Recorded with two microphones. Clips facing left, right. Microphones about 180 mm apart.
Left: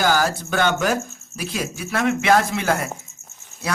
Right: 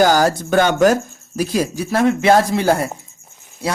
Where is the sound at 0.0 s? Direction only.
40° right (ahead or behind).